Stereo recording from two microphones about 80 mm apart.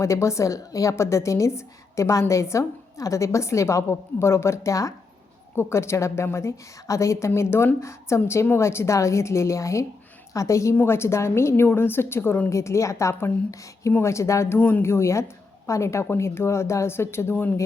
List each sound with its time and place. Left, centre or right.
0.0 s a woman's voice: left